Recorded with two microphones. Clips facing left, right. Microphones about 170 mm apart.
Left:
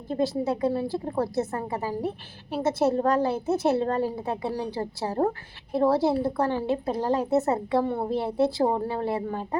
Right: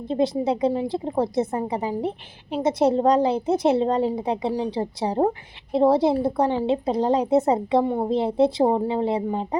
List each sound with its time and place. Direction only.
0.1 s a woman's voice: 20° right (ahead or behind)